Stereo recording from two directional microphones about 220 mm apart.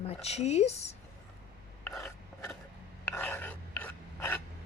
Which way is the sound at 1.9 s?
10° left (ahead or behind).